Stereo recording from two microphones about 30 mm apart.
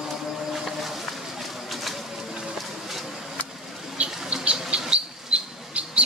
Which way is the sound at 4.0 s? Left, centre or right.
Right.